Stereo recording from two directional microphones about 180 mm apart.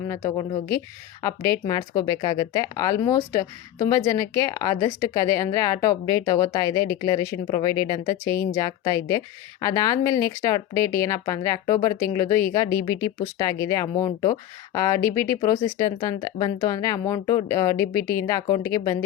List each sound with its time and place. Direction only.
0.1 s speech: 20° left (ahead or behind)
1.6 s speech: 20° left (ahead or behind)
10.1 s speech: 30° right (ahead or behind)
10.4 s speech: 20° left (ahead or behind)
15.0 s speech: 35° right (ahead or behind)
15.4 s speech: 20° left (ahead or behind)